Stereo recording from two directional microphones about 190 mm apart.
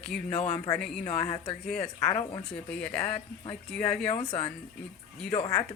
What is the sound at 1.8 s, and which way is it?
Speech, 20° left (ahead or behind).